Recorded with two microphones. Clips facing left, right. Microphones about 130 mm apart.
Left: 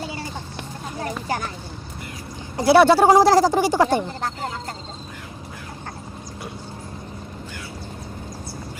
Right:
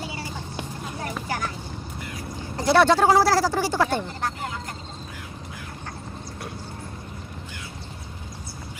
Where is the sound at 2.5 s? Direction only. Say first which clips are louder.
Left 4 dB; 5° left (ahead or behind); by 4.5 s 25° left (ahead or behind).